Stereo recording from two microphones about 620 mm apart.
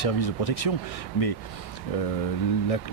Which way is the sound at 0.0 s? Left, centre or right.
Left.